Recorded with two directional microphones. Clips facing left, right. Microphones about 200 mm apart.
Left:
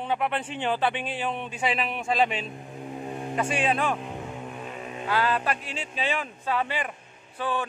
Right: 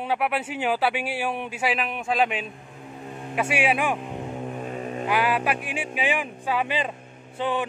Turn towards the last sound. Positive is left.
turn(degrees=-20)  # may be behind; listen again after turning